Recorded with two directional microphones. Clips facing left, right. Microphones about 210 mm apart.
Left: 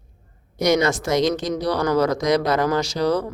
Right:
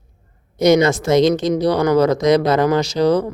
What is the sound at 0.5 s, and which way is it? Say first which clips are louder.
Speech: right 6 dB; 25° right (ahead or behind).